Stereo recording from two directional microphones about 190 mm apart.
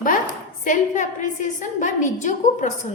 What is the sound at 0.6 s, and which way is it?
A woman's voice, 40° left (ahead or behind).